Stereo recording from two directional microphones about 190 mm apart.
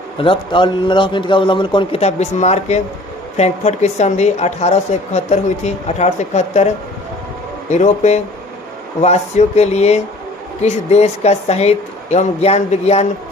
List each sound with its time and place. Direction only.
0.2 s a man's voice: 25° left (ahead or behind)